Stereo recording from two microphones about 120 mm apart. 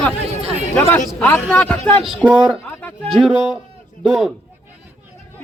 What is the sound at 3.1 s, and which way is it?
Speech, 5° right (ahead or behind).